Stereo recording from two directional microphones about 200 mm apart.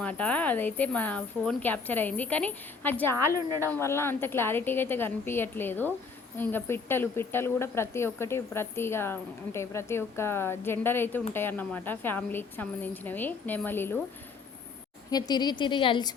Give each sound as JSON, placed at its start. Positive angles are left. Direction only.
{"t": 0.0, "sound": "speech", "side_deg": 5}
{"t": 15.1, "sound": "a woman's voice", "side_deg": 20}